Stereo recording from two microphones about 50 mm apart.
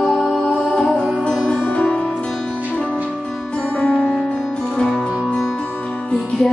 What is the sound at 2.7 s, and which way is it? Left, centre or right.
Music, left.